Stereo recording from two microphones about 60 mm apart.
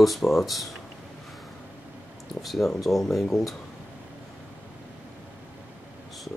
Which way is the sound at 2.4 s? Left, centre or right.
Centre.